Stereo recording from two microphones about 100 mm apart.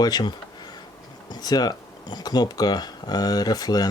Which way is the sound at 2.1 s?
45° left (ahead or behind).